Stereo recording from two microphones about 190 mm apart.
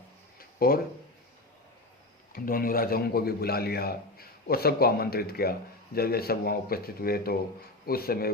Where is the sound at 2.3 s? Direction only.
50° left (ahead or behind).